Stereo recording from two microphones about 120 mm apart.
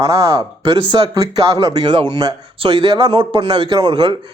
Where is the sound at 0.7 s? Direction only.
40° right (ahead or behind).